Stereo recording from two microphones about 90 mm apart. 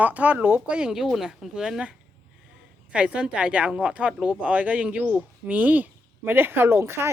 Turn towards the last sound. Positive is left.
turn(degrees=-25)  # may be behind; listen again after turning